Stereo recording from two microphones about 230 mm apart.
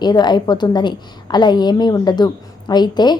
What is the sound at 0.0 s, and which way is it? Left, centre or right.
A woman's voice, centre.